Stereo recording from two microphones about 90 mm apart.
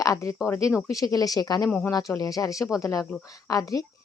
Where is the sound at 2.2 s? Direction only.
40° left (ahead or behind).